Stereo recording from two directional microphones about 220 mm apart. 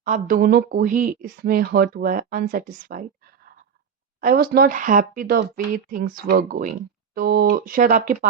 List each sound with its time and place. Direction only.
0.0 s speech: 35° right (ahead or behind)
4.2 s speech: 45° right (ahead or behind)